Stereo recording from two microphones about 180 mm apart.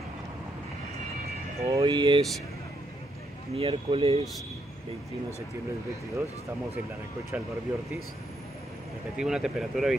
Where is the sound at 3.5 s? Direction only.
35° right (ahead or behind).